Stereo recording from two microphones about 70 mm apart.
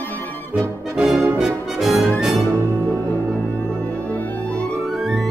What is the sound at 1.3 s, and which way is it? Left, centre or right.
Brass instrument, centre.